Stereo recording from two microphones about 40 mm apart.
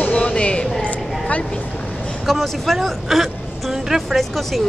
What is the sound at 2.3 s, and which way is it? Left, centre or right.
Speech, centre.